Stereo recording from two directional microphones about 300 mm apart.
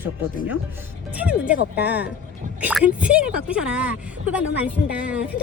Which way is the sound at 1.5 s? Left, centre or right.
Left.